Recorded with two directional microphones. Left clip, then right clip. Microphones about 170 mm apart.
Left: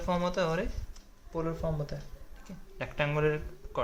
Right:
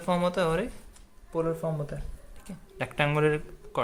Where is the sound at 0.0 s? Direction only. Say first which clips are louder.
Right 4 dB; 35° right (ahead or behind).